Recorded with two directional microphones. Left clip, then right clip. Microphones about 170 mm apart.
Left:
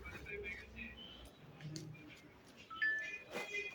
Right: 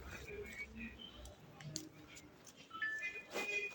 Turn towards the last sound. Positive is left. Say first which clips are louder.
# right 3 dB
turn(degrees=0)  # may be behind; listen again after turning